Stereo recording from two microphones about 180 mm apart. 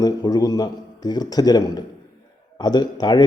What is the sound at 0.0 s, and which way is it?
Speech, 20° left (ahead or behind).